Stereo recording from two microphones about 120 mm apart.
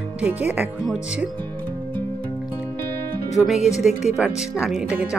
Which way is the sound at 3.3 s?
Centre (ahead or behind).